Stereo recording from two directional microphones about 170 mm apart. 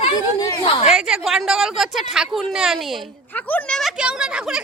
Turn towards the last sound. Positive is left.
turn(degrees=-5)  # may be behind; listen again after turning